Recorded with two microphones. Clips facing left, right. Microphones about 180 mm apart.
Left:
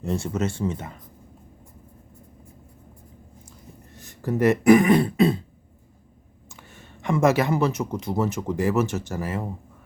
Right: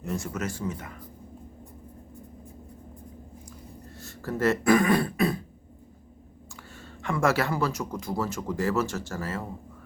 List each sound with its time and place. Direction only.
0.0 s speech: 25° left (ahead or behind)
3.9 s speech: 20° left (ahead or behind)
6.7 s speech: 20° left (ahead or behind)